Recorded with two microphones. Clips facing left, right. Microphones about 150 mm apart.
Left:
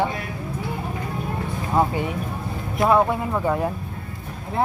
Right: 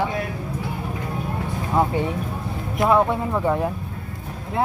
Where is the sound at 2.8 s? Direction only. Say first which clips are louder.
Even; 20° left (ahead or behind).